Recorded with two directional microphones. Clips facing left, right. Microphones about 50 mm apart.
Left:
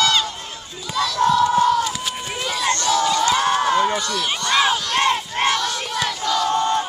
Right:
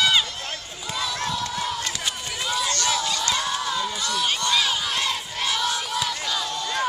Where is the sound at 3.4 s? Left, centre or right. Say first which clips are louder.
Left 9 dB; left.